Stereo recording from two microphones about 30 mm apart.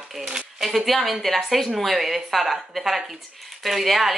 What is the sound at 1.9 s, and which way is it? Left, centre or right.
Speech, centre.